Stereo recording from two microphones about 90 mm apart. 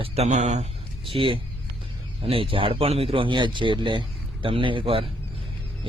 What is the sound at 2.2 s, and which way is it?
Speech, 90° right.